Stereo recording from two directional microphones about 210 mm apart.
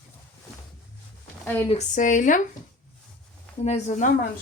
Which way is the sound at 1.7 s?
35° left (ahead or behind).